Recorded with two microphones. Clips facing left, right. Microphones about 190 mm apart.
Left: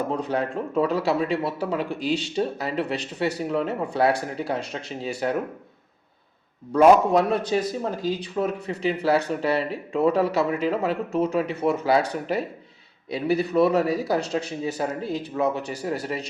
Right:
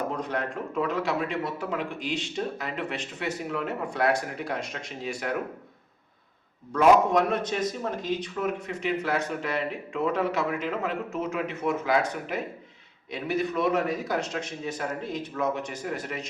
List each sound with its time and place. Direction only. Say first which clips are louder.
0.3 s speech: left 5 dB; 30° left (ahead or behind)
7.1 s speech: left 4 dB; 35° left (ahead or behind)